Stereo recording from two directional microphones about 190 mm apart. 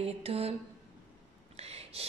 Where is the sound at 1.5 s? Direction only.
35° right (ahead or behind).